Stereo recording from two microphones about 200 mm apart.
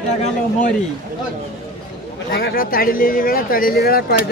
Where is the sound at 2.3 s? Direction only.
50° left (ahead or behind).